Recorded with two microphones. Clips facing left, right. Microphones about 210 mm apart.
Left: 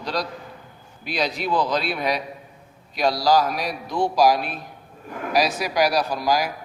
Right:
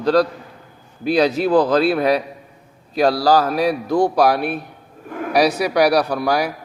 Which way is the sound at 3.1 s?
35° right (ahead or behind).